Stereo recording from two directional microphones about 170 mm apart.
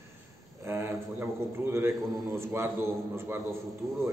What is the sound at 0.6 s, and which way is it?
A man's voice, 15° right (ahead or behind).